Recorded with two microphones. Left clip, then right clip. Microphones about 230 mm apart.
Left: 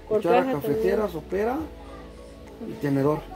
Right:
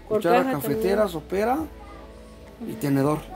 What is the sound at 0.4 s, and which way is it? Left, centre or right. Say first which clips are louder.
Speech: even; right.